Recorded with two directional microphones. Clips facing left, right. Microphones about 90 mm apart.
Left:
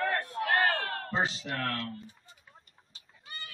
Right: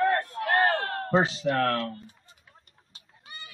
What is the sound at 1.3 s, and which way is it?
Speech, 45° right (ahead or behind).